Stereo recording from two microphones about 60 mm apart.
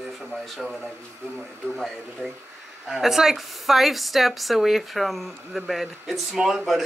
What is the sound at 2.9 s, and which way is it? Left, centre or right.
A woman's voice, centre.